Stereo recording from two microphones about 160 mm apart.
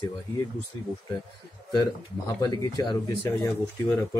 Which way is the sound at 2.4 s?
25° left (ahead or behind).